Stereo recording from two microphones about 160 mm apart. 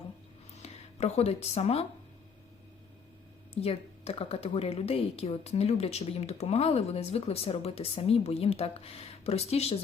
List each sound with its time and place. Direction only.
0.5 s speech: 45° left (ahead or behind)
3.5 s a woman's voice: 40° left (ahead or behind)